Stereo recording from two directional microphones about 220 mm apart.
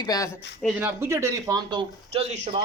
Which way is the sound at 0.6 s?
10° right (ahead or behind).